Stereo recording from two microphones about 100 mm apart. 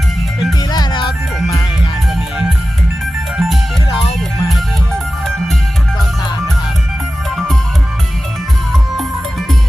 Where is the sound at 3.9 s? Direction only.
70° left (ahead or behind).